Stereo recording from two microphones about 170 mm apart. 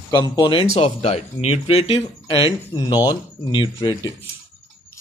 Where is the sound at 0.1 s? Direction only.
25° left (ahead or behind).